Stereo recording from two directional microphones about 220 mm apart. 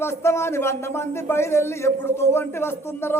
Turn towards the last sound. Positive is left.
turn(degrees=10)  # may be behind; listen again after turning